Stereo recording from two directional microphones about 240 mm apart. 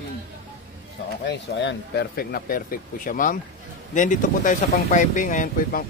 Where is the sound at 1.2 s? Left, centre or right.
Left.